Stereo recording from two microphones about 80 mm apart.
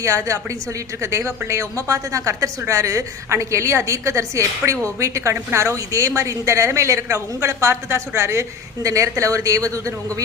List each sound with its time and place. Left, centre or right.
0.0 s a woman's voice: right